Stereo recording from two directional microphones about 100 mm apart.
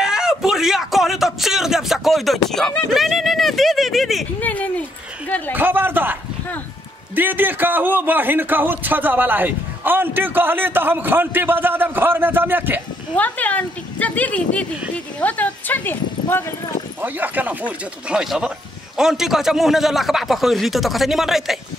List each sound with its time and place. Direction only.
0.0 s a sound: 5° right (ahead or behind)
2.5 s a man's voice: 5° left (ahead or behind)
4.4 s speech: 15° left (ahead or behind)
5.5 s a man's voice: 20° right (ahead or behind)
7.2 s a man's voice: 20° right (ahead or behind)
13.1 s speech: 15° left (ahead or behind)
15.1 s clip-clop: 15° left (ahead or behind)
17.0 s a man's voice: 15° right (ahead or behind)